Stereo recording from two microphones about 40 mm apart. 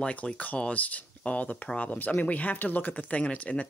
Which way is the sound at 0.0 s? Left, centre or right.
Left.